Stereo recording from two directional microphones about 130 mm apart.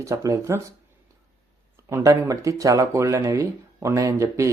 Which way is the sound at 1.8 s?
20° right (ahead or behind).